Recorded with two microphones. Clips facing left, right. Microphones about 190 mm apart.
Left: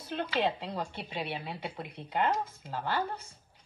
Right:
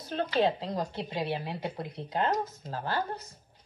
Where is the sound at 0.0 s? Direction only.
10° left (ahead or behind).